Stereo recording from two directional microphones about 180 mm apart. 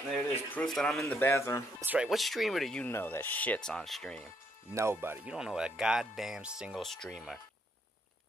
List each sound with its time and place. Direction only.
0.1 s speech: 5° left (ahead or behind)
1.0 s speech: 15° left (ahead or behind)
1.8 s speech: 5° right (ahead or behind)
4.7 s speech: 15° right (ahead or behind)